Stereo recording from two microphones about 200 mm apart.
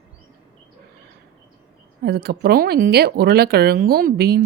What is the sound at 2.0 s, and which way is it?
Speech, 50° right (ahead or behind).